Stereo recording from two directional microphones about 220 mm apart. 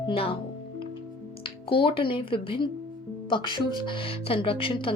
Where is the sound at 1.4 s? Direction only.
25° left (ahead or behind).